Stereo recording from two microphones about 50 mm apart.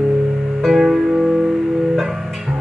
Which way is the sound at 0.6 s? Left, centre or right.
Centre.